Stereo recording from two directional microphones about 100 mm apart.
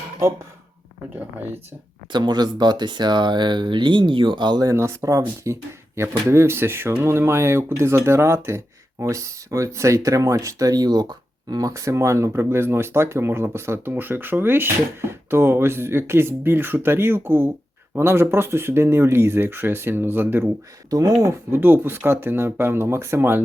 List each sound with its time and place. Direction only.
1.1 s speech: 15° right (ahead or behind)
2.1 s speech: 45° right (ahead or behind)
4.7 s speech: 30° right (ahead or behind)
20.9 s speech: 35° right (ahead or behind)
21.5 s speech: 20° right (ahead or behind)